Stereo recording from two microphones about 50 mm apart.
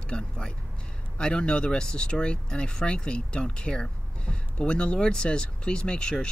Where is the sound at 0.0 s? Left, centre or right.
Left.